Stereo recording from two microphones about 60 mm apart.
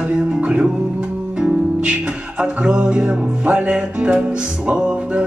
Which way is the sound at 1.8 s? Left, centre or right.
Centre.